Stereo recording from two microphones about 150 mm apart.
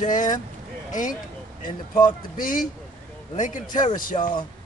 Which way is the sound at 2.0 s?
65° left (ahead or behind).